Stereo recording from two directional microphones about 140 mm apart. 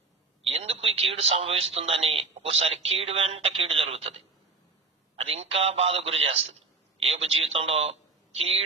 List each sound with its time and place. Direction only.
0.5 s a man's voice: 45° right (ahead or behind)
5.1 s a man's voice: 45° right (ahead or behind)